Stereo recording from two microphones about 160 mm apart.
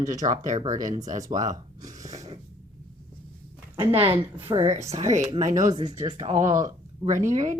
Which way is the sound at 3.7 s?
35° right (ahead or behind).